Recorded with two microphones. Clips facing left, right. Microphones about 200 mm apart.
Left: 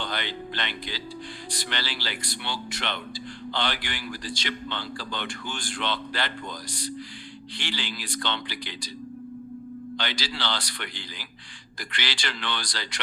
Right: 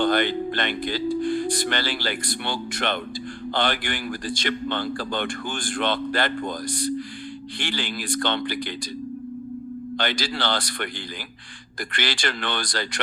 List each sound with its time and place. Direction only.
0.0 s a man's voice: 50° right (ahead or behind)
10.0 s a man's voice: 50° right (ahead or behind)